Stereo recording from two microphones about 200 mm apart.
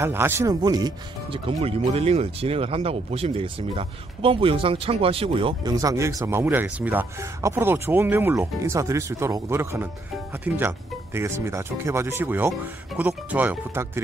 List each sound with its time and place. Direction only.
0.0 s speech: 10° right (ahead or behind)